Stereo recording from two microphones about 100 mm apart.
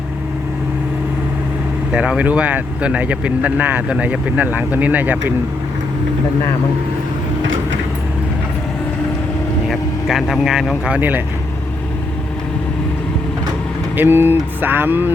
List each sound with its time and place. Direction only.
1.9 s speech: 10° right (ahead or behind)
9.6 s speech: centre (ahead or behind)
13.9 s speech: 20° right (ahead or behind)